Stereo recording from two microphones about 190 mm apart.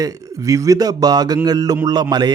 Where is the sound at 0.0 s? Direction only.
20° right (ahead or behind).